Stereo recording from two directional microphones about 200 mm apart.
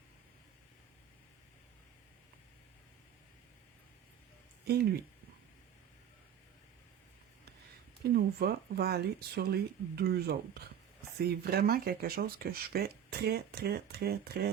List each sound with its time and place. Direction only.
4.6 s speech: 55° right (ahead or behind)
8.1 s speech: 50° right (ahead or behind)